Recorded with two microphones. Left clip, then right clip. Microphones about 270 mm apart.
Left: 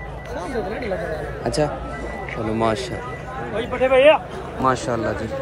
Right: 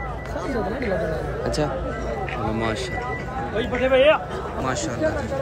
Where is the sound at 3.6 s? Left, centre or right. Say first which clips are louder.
Left 2 dB; centre.